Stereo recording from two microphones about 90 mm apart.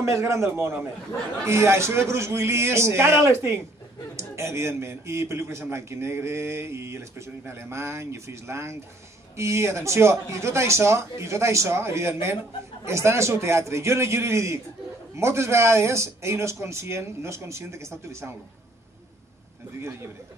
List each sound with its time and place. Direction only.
0.0 s a man's voice: 30° right (ahead or behind)
19.8 s a man's voice: 30° right (ahead or behind)